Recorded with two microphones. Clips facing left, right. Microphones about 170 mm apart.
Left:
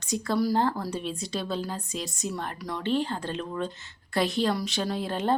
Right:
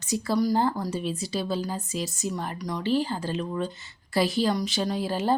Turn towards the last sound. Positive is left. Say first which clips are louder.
# right 2 dB
turn(degrees=-5)  # may be behind; listen again after turning